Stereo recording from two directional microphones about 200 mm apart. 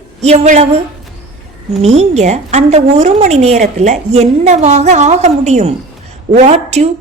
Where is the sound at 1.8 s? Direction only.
35° right (ahead or behind).